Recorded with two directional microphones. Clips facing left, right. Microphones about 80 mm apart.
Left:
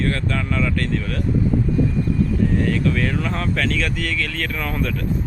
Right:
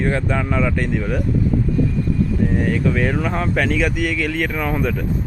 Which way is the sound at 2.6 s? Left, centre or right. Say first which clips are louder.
Right 1 dB; centre.